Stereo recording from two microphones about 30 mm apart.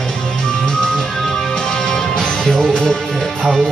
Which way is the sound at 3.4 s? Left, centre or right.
Centre.